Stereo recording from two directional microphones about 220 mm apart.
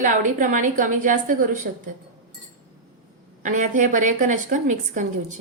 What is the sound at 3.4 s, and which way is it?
Speech, 35° right (ahead or behind).